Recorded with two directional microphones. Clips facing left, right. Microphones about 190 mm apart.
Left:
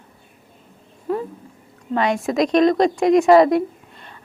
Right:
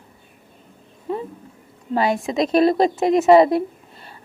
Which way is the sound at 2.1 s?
Centre (ahead or behind).